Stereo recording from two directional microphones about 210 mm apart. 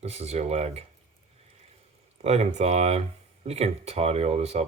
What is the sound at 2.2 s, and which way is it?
Speech, 30° right (ahead or behind).